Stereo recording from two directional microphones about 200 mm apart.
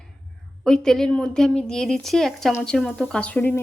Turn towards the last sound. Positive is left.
turn(degrees=10)  # may be behind; listen again after turning